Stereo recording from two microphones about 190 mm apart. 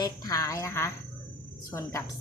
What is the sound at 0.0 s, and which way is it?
A woman's voice, 20° left (ahead or behind).